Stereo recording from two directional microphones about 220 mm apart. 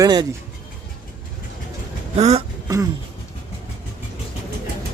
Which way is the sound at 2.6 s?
15° right (ahead or behind).